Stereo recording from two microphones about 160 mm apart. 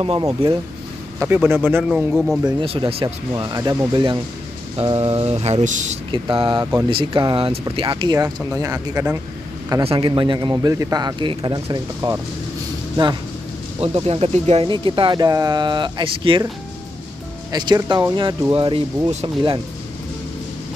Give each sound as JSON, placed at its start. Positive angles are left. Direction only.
{"t": 0.4, "sound": "speech", "side_deg": -35}
{"t": 1.2, "sound": "speech", "side_deg": -10}
{"t": 2.4, "sound": "speech", "side_deg": -35}
{"t": 6.1, "sound": "speech", "side_deg": -30}
{"t": 8.5, "sound": "speech", "side_deg": -20}
{"t": 9.8, "sound": "speech", "side_deg": -30}
{"t": 14.7, "sound": "speech", "side_deg": -30}
{"t": 17.5, "sound": "speech", "side_deg": -25}